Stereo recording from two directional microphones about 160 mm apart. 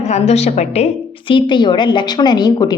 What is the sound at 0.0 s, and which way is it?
Speech, 40° left (ahead or behind).